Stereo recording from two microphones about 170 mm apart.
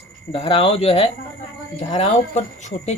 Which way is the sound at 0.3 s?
35° left (ahead or behind).